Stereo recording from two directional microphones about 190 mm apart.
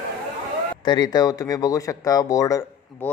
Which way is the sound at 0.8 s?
20° left (ahead or behind).